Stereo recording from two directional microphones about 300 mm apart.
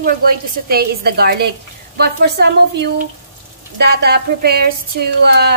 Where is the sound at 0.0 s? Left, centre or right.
Right.